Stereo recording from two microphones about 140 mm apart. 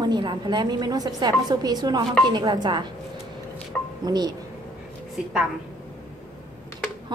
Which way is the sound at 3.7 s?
10° left (ahead or behind).